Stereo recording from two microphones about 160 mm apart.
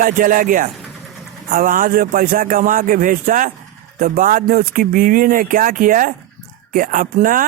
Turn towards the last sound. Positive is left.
turn(degrees=-60)  # may be behind; listen again after turning